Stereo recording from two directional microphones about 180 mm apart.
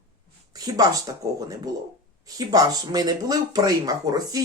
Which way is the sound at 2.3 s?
20° right (ahead or behind).